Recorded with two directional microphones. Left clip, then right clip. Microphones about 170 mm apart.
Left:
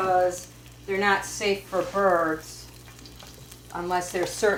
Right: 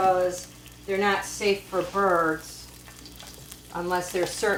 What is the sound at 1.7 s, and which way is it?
Speech, 30° left (ahead or behind).